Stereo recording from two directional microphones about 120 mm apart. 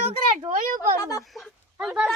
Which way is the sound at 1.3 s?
Centre (ahead or behind).